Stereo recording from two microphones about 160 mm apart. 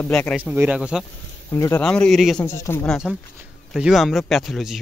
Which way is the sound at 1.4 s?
20° left (ahead or behind).